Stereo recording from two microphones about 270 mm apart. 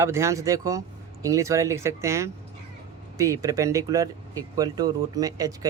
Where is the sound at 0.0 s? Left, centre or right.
Centre.